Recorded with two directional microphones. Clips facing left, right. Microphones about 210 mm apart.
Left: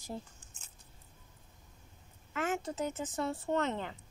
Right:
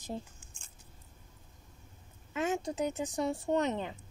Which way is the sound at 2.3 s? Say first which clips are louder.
Right 2 dB; 15° right (ahead or behind).